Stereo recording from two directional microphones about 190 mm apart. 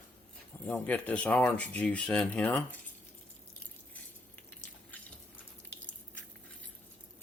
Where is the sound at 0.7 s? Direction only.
5° left (ahead or behind).